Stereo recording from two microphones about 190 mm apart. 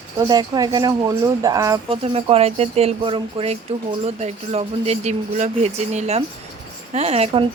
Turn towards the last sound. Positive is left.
turn(degrees=-35)  # may be behind; listen again after turning